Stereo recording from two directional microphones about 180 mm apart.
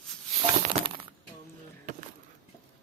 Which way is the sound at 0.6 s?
35° right (ahead or behind).